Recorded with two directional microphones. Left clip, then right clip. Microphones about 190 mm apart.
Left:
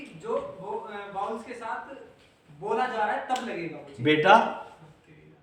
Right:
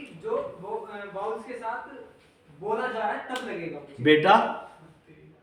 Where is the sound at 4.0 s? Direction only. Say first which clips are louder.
Right 1 dB; 10° left (ahead or behind).